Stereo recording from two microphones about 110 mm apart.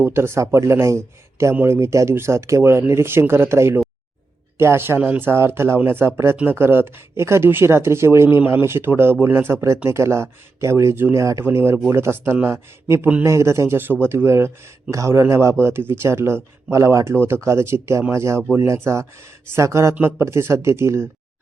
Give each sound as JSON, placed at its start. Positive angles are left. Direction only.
{"t": 0.0, "sound": "speech", "side_deg": -25}